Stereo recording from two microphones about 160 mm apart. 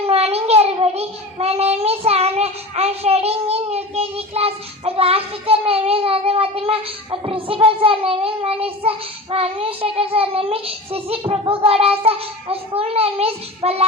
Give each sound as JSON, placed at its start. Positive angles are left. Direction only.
{"t": 0.0, "sound": "a child's voice", "side_deg": -40}